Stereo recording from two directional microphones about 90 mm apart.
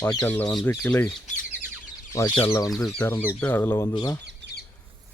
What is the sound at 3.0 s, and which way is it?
Speech, 25° left (ahead or behind).